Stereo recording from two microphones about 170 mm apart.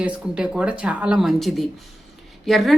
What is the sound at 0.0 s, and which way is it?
Speech, 5° right (ahead or behind).